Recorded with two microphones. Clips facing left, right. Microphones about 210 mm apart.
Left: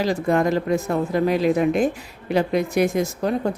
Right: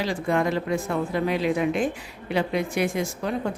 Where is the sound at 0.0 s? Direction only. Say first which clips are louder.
Left 4 dB; 40° left (ahead or behind).